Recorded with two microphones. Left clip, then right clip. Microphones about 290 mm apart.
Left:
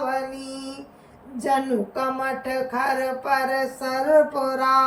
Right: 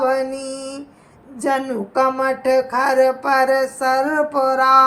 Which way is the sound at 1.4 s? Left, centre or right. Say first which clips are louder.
Right 2 dB; centre.